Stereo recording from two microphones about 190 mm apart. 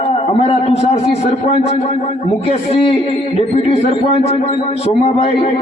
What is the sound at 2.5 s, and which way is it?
Speech, 30° left (ahead or behind).